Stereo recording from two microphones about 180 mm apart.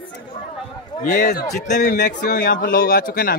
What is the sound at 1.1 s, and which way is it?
A man's voice, 50° left (ahead or behind).